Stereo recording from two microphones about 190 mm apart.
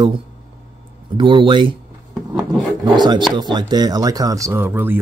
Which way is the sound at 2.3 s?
25° right (ahead or behind).